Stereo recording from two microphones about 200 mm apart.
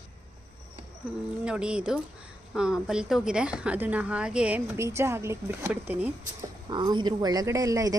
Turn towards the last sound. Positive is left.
turn(degrees=-15)  # may be behind; listen again after turning